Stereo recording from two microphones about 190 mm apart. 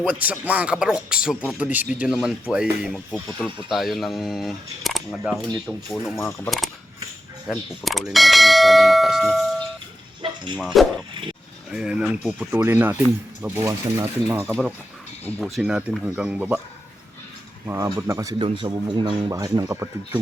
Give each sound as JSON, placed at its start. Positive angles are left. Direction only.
{"t": 0.0, "sound": "speech", "side_deg": -5}
{"t": 6.1, "sound": "speech", "side_deg": 15}
{"t": 7.4, "sound": "speech", "side_deg": 0}
{"t": 15.2, "sound": "speech", "side_deg": 0}
{"t": 17.7, "sound": "a man's voice", "side_deg": -15}